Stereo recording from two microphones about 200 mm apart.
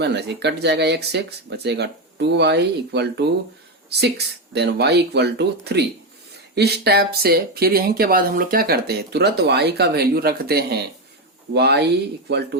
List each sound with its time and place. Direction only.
0.0 s speech: 55° right (ahead or behind)